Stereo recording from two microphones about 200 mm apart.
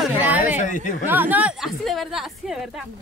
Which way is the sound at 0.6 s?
40° left (ahead or behind).